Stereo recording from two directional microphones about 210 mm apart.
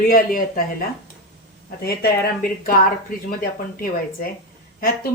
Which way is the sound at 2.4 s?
40° left (ahead or behind).